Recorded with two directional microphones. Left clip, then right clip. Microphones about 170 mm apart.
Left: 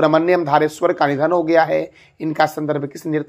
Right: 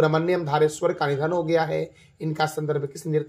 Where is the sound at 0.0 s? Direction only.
45° left (ahead or behind).